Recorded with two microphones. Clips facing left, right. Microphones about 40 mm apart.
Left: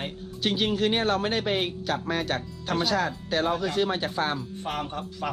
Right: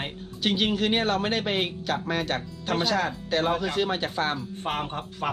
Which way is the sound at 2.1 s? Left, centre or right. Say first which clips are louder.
Even; centre.